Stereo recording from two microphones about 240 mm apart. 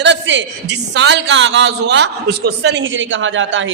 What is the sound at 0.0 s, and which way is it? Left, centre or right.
A man's voice, right.